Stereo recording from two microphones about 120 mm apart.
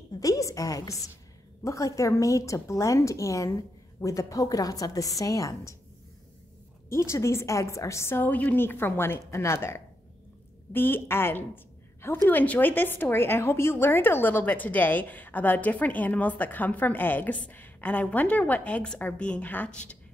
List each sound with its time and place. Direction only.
0.2 s speech: 30° left (ahead or behind)
6.9 s a woman's voice: 25° left (ahead or behind)